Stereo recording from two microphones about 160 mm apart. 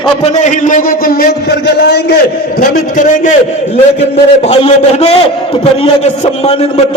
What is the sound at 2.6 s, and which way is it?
Speech, 55° left (ahead or behind).